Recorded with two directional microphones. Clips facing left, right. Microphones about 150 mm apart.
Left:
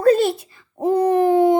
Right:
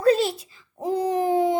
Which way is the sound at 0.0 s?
50° left (ahead or behind).